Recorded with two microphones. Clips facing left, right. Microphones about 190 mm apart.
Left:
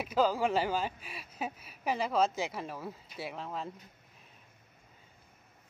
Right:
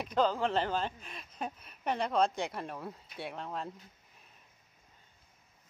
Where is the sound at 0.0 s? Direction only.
5° left (ahead or behind).